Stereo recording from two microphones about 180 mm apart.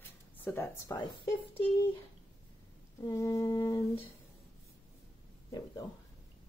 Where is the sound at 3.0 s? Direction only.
20° left (ahead or behind).